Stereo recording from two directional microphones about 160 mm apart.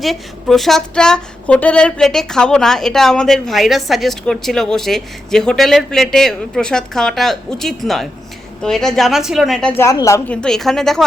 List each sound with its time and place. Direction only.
0.0 s speech: centre (ahead or behind)
9.8 s a woman's voice: 20° left (ahead or behind)
10.2 s speech: 5° left (ahead or behind)